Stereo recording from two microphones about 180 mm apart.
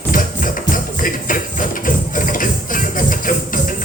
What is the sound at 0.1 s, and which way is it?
Music, 45° left (ahead or behind).